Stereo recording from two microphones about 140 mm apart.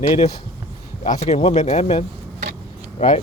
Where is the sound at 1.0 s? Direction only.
60° left (ahead or behind).